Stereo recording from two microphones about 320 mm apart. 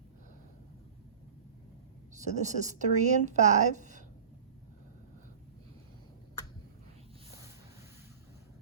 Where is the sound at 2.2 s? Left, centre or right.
Right.